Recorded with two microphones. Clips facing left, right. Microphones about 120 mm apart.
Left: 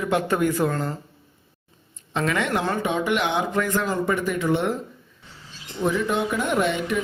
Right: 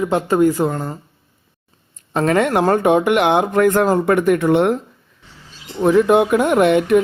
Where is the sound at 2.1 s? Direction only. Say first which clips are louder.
Right 8 dB; 45° right (ahead or behind).